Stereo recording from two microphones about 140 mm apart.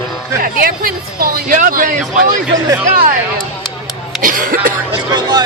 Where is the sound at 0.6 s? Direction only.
90° right.